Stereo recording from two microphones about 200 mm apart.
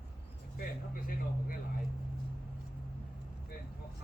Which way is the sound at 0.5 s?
45° left (ahead or behind).